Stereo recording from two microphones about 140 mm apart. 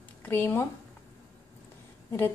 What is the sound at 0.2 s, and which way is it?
Speech, 15° left (ahead or behind).